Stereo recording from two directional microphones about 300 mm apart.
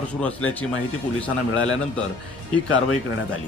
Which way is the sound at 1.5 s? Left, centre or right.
Left.